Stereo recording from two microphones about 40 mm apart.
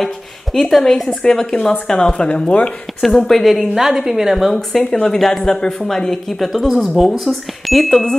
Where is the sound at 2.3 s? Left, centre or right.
Left.